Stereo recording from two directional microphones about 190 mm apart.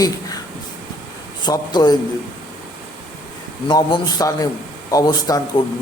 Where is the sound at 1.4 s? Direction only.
20° left (ahead or behind).